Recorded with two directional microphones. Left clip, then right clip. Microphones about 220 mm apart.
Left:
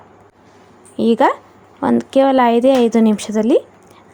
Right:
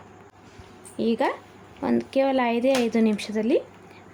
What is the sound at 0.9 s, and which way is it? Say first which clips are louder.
Speech: left 11 dB; 30° left (ahead or behind).